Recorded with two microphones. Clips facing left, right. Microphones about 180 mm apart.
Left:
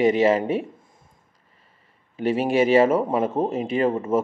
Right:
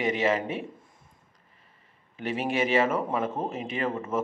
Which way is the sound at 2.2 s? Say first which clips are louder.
Left 8 dB; 35° left (ahead or behind).